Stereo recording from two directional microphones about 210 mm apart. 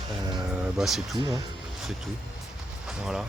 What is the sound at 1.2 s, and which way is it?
Speech, 20° right (ahead or behind).